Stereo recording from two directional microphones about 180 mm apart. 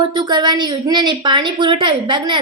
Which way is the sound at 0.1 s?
25° right (ahead or behind).